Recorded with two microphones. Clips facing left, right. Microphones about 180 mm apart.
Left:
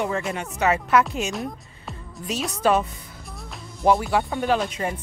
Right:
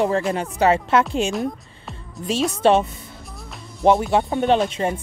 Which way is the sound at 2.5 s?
25° right (ahead or behind).